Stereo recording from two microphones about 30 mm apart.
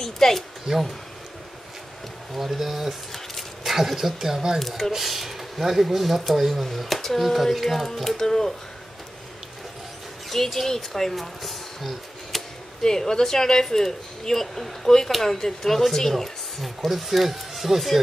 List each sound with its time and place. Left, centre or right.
0.0 s speech: centre
0.7 s speech: centre
2.3 s speech: centre
4.6 s speech: centre
4.9 s speech: centre
10.3 s speech: centre
12.8 s speech: centre
16.6 s speech: centre